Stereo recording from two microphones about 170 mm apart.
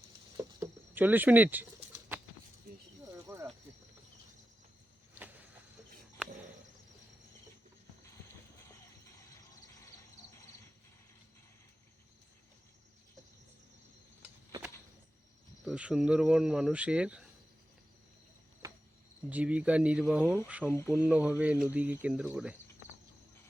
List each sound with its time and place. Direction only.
0.6 s bird: 10° right (ahead or behind)
3.3 s snake: 15° right (ahead or behind)
14.2 s a sound: 10° right (ahead or behind)
15.6 s speech: 5° right (ahead or behind)
19.3 s speech: 10° right (ahead or behind)
20.7 s speech: 15° left (ahead or behind)
20.9 s speech: 10° right (ahead or behind)